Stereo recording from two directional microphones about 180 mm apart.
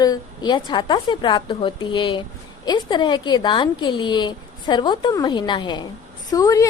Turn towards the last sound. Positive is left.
turn(degrees=20)  # may be behind; listen again after turning